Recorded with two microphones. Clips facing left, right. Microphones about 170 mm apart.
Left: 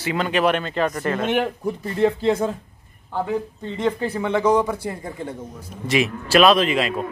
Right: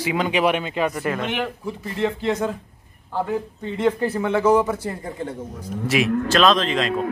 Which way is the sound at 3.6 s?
10° right (ahead or behind).